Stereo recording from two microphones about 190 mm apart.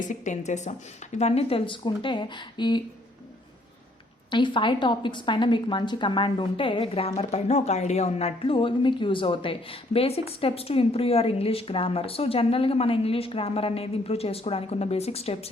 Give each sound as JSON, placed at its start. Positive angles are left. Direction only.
{"t": 0.0, "sound": "speech", "side_deg": 40}
{"t": 4.3, "sound": "a woman's voice", "side_deg": 25}